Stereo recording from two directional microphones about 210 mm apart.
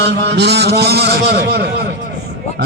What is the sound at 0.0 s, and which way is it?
A man's voice, 55° right (ahead or behind).